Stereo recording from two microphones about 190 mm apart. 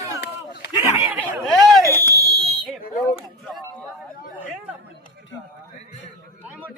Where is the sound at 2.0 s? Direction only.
50° left (ahead or behind).